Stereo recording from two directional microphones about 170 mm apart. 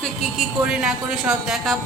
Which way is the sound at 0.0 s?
Centre (ahead or behind).